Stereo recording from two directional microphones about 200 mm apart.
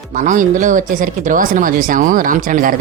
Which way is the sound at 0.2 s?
40° right (ahead or behind).